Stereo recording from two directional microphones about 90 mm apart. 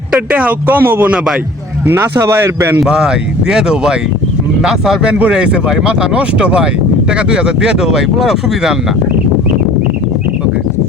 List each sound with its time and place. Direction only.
0.1 s speech: 15° right (ahead or behind)
2.2 s speech: 25° right (ahead or behind)
2.8 s speech: 10° right (ahead or behind)